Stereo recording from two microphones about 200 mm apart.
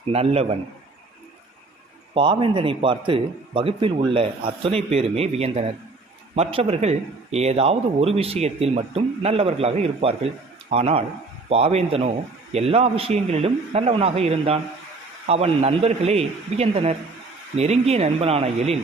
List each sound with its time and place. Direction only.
0.0 s a man's voice: 30° right (ahead or behind)
2.1 s a man's voice: 25° right (ahead or behind)